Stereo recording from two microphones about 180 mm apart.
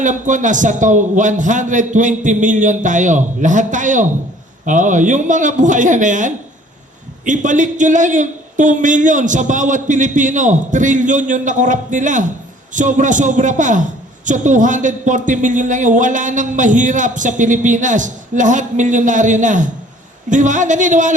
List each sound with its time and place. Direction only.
0.0 s a man's voice: 45° right (ahead or behind)